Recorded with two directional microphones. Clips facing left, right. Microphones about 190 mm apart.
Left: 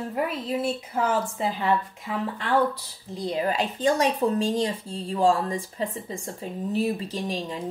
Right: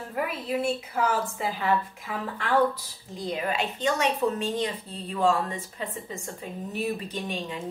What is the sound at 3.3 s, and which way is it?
Speech, 35° left (ahead or behind).